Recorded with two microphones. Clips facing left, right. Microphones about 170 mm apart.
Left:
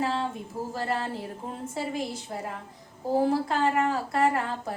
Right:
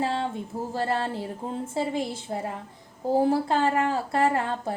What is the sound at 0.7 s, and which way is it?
Speech, 30° right (ahead or behind).